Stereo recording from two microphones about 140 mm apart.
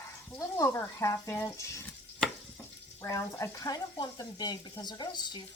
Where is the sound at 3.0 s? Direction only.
20° left (ahead or behind).